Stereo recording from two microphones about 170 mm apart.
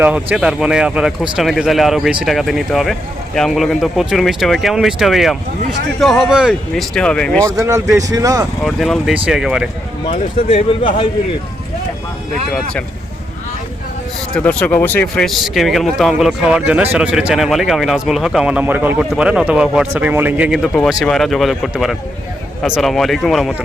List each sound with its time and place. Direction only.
0.0 s speech: 10° right (ahead or behind)
7.4 s speech: 20° right (ahead or behind)
8.6 s speech: centre (ahead or behind)
10.1 s speech: 35° left (ahead or behind)
14.3 s speech: 10° left (ahead or behind)